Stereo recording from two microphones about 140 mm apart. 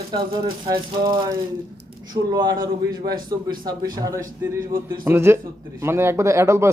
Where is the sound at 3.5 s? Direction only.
30° right (ahead or behind).